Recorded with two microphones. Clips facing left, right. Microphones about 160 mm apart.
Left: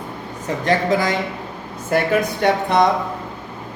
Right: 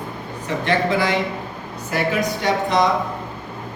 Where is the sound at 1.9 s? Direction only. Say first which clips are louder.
Left 3 dB; 55° left (ahead or behind).